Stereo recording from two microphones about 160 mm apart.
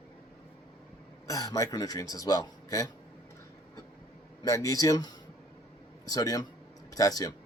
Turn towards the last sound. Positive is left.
turn(degrees=20)  # may be behind; listen again after turning